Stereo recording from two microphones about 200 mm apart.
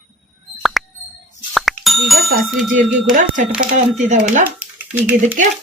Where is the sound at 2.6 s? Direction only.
Centre (ahead or behind).